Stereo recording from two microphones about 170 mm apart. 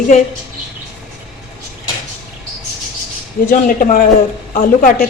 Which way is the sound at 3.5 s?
55° left (ahead or behind).